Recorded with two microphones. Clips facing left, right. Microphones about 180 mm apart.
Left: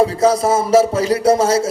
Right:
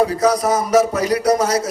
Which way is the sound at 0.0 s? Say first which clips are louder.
Left 2 dB; 25° left (ahead or behind).